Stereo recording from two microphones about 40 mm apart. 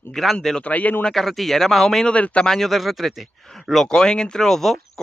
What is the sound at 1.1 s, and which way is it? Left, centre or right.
Speech, centre.